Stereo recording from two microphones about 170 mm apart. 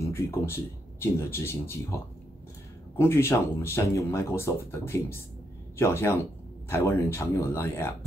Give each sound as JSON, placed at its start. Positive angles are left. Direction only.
{"t": 0.0, "sound": "speech", "side_deg": 15}
{"t": 3.0, "sound": "speech", "side_deg": 15}